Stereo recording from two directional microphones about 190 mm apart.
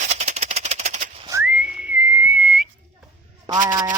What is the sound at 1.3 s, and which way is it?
Whistling, 10° right (ahead or behind).